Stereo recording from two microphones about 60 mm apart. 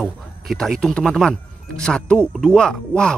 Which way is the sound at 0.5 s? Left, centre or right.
Centre.